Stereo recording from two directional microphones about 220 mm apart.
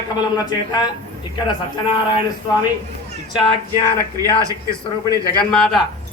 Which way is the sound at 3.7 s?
15° right (ahead or behind).